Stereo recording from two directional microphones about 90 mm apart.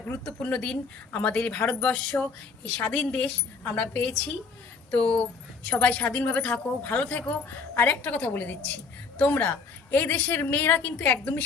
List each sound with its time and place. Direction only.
0.1 s a woman's voice: 15° left (ahead or behind)